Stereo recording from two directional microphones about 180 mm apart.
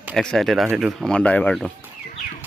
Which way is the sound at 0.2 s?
5° left (ahead or behind).